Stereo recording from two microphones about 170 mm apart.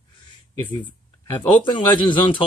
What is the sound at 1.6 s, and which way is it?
Speech, 25° left (ahead or behind).